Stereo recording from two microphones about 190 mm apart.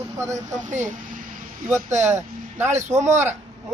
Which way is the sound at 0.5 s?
40° right (ahead or behind).